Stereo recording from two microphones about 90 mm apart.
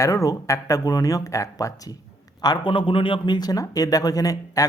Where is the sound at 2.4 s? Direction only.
60° left (ahead or behind).